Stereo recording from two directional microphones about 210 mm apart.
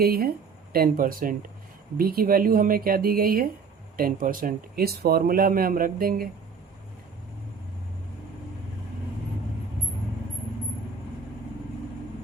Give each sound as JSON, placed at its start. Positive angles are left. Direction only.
{"t": 0.0, "sound": "speech", "side_deg": -45}